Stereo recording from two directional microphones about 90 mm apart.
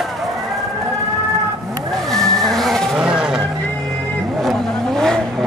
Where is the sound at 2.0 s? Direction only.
5° left (ahead or behind).